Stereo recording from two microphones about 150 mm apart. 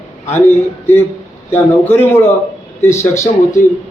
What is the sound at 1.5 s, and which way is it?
A man's voice, 15° left (ahead or behind).